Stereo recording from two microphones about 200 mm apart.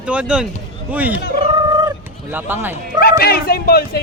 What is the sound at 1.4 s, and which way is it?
Cat, 25° right (ahead or behind).